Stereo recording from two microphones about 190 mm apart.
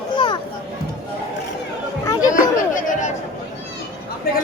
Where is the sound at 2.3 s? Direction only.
45° left (ahead or behind).